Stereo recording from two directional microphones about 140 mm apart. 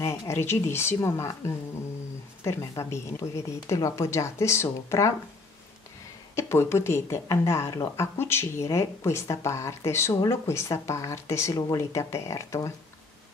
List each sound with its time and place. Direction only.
0.0 s speech: 20° left (ahead or behind)
6.3 s speech: 20° left (ahead or behind)